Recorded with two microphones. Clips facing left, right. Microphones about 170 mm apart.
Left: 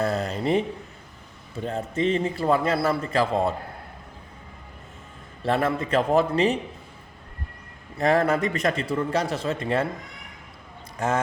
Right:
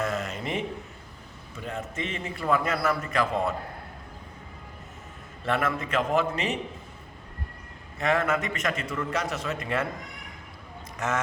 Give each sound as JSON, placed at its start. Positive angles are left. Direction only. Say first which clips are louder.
{"t": 0.0, "sound": "a sound", "louder": "left 5 dB", "side_deg": 35}
{"t": 1.5, "sound": "a man's voice", "louder": "left 7 dB", "side_deg": 35}
{"t": 5.4, "sound": "a man's voice", "louder": "left 4 dB", "side_deg": 30}
{"t": 7.9, "sound": "a man's voice", "louder": "left 5 dB", "side_deg": 35}
{"t": 10.9, "sound": "speech", "louder": "left 4 dB", "side_deg": 30}